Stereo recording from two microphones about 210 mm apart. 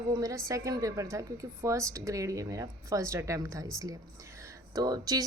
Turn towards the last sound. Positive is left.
turn(degrees=-20)  # may be behind; listen again after turning